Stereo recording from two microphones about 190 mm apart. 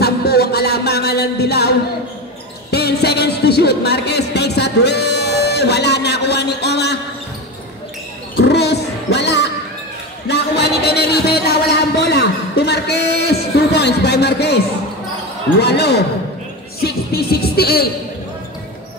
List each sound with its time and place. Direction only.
0.0 s music: 55° left (ahead or behind)
8.4 s music: 60° left (ahead or behind)
10.2 s a sound: 60° left (ahead or behind)
15.6 s speech: 60° left (ahead or behind)
16.8 s music: 55° left (ahead or behind)